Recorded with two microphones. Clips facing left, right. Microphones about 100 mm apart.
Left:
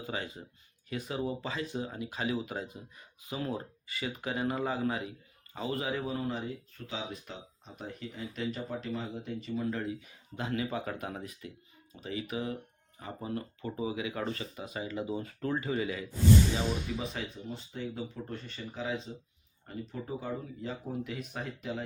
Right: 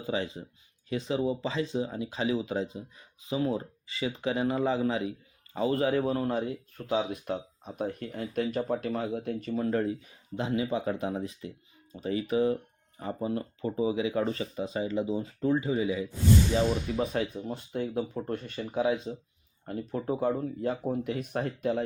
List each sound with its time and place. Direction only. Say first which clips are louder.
0.0 s speech: right 6 dB; 25° right (ahead or behind)
6.0 s speech: right 6 dB; 50° right (ahead or behind)
9.5 s speech: right 6 dB; 35° right (ahead or behind)
10.3 s speech: right 5 dB; 25° right (ahead or behind)
17.0 s speech: right 8 dB; 50° right (ahead or behind)